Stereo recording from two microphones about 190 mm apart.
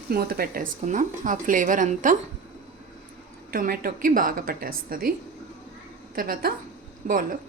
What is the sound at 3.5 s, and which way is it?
Speech, 50° right (ahead or behind).